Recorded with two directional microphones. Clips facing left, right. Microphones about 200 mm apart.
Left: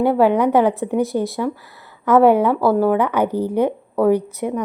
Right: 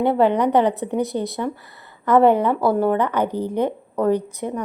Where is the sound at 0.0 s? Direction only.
5° left (ahead or behind).